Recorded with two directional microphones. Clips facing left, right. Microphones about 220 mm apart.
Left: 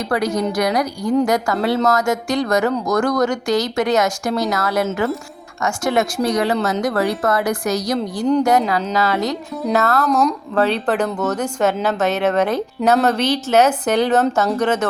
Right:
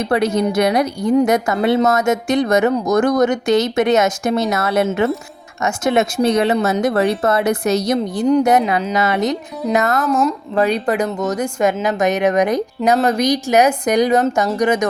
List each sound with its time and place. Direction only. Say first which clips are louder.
0.0 s speech: right 3 dB; 25° right (ahead or behind)
10.0 s a woman's voice: even; centre (ahead or behind)
10.5 s speech: right 3 dB; 10° right (ahead or behind)